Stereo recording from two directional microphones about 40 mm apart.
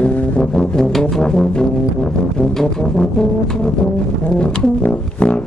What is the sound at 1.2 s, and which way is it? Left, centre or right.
Brass instrument, centre.